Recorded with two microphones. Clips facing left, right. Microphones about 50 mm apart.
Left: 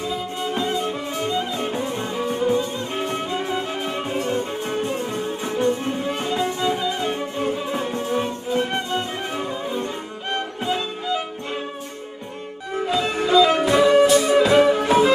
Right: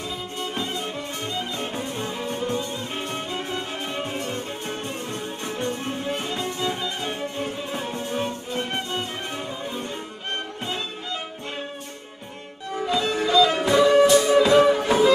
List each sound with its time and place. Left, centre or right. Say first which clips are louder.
0.1 s music: left 5 dB; centre
10.3 s violin: left 6 dB; centre
13.3 s music: left 3 dB; left
13.6 s music: left 1 dB; centre